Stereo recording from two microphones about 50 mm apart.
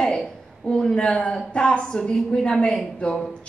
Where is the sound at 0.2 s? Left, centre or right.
Centre.